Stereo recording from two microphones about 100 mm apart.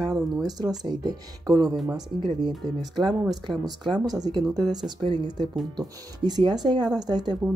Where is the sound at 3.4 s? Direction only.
45° right (ahead or behind).